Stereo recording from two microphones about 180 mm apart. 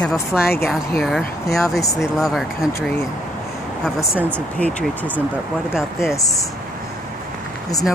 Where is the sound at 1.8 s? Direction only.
20° left (ahead or behind).